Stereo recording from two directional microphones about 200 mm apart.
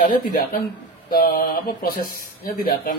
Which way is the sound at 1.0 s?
45° left (ahead or behind).